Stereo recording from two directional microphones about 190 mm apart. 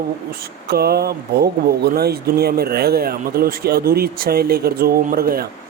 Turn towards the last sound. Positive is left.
turn(degrees=-50)  # may be behind; listen again after turning